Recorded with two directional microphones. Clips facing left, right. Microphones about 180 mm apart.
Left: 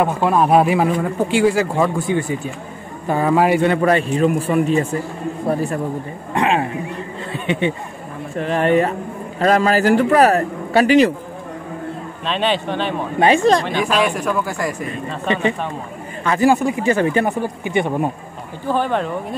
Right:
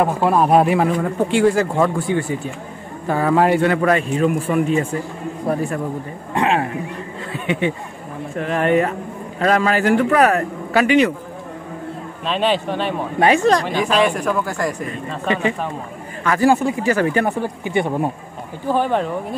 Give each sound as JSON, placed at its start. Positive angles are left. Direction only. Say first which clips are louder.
{"t": 0.0, "sound": "speech", "louder": "even", "side_deg": 0}
{"t": 2.0, "sound": "speech", "louder": "left 1 dB", "side_deg": 15}
{"t": 3.6, "sound": "a man's voice", "louder": "left 1 dB", "side_deg": 30}
{"t": 6.3, "sound": "a man's voice", "louder": "even", "side_deg": 20}
{"t": 12.3, "sound": "speech", "louder": "right 1 dB", "side_deg": -5}
{"t": 13.2, "sound": "speech", "louder": "left 1 dB", "side_deg": 25}
{"t": 13.8, "sound": "speech", "louder": "right 1 dB", "side_deg": 5}
{"t": 15.2, "sound": "speech", "louder": "left 1 dB", "side_deg": 25}
{"t": 16.3, "sound": "speech", "louder": "even", "side_deg": 15}
{"t": 18.7, "sound": "speech", "louder": "right 1 dB", "side_deg": -10}